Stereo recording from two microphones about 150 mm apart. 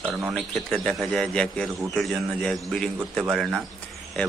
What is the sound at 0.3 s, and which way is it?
A man's voice, 5° left (ahead or behind).